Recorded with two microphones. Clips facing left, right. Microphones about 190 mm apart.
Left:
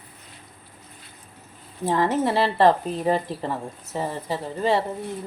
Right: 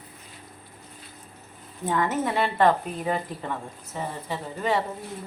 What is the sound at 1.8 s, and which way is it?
A woman's voice, 30° left (ahead or behind).